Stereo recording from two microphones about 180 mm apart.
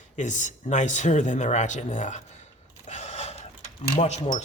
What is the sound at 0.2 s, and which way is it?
Speech, 40° left (ahead or behind).